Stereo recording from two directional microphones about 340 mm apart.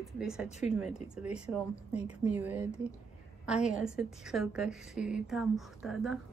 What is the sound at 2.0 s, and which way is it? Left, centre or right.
Speech, centre.